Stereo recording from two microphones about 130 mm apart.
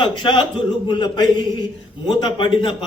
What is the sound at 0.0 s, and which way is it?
A woman's voice, 35° left (ahead or behind).